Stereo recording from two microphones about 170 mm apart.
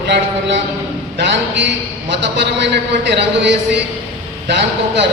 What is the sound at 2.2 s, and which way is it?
A man's voice, 90° right.